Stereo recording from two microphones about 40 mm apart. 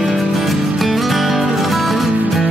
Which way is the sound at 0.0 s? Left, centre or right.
Centre.